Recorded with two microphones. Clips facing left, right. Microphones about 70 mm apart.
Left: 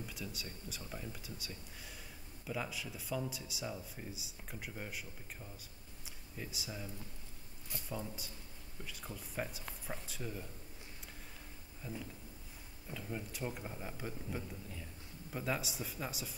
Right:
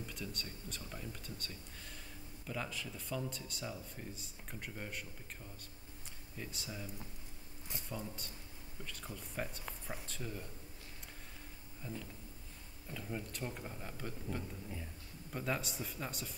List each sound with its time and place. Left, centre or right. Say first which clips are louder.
0.0 s speech: even; centre
7.7 s a man's voice: left 1 dB; right
8.8 s speech: even; centre
11.8 s speech: left 1 dB; centre